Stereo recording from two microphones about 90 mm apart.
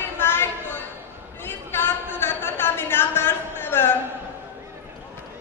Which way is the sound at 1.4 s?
25° left (ahead or behind).